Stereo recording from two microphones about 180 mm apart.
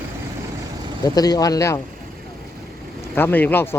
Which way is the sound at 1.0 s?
20° left (ahead or behind).